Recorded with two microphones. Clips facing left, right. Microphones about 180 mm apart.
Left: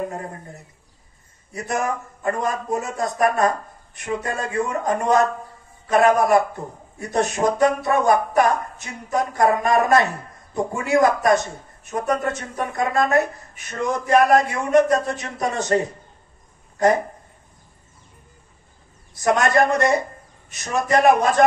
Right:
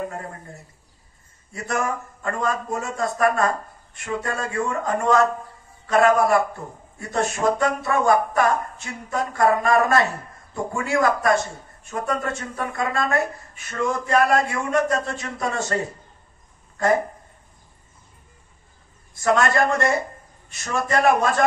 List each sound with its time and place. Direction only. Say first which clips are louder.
1.5 s speech: left 1 dB; 20° left (ahead or behind)
19.2 s speech: left 2 dB; 20° left (ahead or behind)